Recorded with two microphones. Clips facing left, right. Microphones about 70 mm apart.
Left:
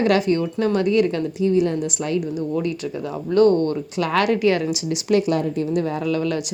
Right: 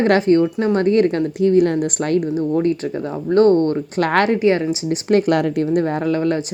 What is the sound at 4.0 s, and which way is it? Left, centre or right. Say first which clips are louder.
Speech: right 4 dB; right.